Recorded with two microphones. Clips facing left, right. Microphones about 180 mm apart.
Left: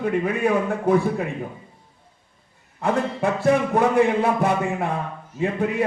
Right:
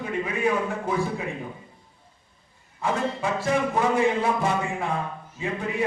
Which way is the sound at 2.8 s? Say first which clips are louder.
Left 4 dB; 60° left (ahead or behind).